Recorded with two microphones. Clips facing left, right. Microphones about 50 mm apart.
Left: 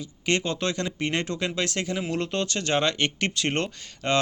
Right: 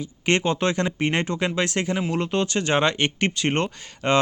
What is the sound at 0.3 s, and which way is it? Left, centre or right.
Speech, right.